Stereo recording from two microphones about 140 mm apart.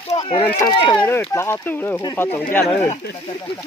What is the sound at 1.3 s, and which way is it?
Speech, 20° left (ahead or behind).